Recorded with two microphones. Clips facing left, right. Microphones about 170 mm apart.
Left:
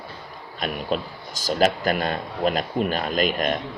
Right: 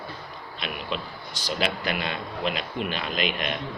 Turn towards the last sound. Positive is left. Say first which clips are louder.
# left 6 dB
turn(degrees=45)  # may be behind; listen again after turning